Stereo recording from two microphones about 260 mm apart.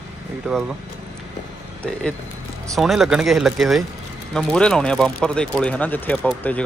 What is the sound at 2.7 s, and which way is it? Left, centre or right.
Speech, centre.